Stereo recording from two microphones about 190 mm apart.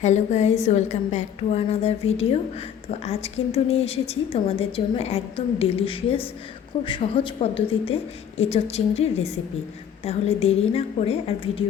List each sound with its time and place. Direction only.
0.0 s a woman's voice: 40° left (ahead or behind)
3.0 s a woman's voice: 35° left (ahead or behind)